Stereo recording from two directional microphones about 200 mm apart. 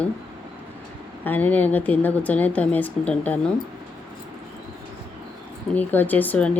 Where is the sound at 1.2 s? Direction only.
10° left (ahead or behind).